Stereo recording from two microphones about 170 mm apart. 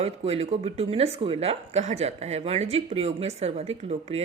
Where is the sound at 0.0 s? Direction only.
35° right (ahead or behind).